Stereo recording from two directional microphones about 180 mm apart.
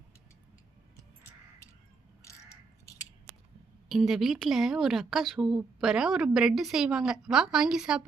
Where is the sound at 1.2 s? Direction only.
15° left (ahead or behind).